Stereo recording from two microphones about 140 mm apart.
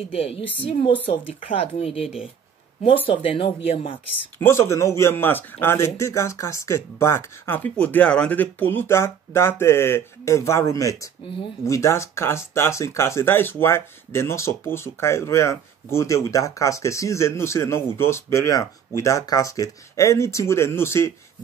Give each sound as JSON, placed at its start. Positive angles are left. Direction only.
{"t": 0.1, "sound": "a woman's voice", "side_deg": 45}
{"t": 3.1, "sound": "speech", "side_deg": 40}
{"t": 4.4, "sound": "speech", "side_deg": 20}